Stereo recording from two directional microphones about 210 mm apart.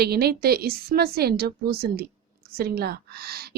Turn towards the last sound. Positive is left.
turn(degrees=-45)  # may be behind; listen again after turning